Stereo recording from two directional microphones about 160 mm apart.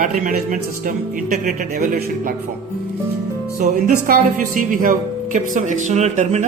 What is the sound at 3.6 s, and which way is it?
Speech, 55° right (ahead or behind).